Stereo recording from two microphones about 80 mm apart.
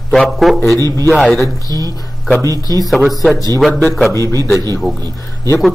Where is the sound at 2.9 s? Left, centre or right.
Centre.